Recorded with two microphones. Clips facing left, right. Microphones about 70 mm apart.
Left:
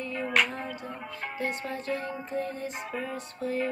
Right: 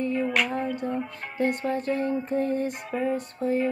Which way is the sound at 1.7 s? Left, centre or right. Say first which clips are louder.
Right 7 dB; right.